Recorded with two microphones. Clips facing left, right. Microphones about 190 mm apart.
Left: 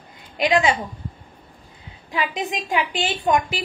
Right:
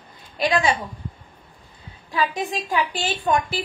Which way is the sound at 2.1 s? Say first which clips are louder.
Right 1 dB; 20° left (ahead or behind).